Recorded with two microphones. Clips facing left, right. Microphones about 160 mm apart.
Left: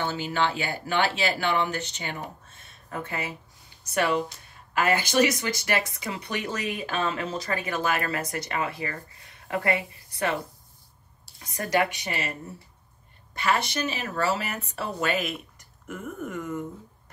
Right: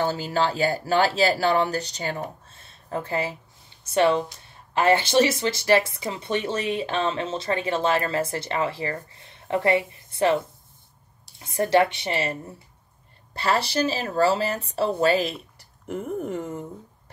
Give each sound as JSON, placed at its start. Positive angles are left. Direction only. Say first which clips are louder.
{"t": 0.0, "sound": "speech", "louder": "right 3 dB", "side_deg": -40}